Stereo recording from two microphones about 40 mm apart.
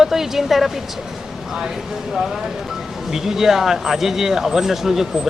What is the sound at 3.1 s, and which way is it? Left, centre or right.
A woman's voice, centre.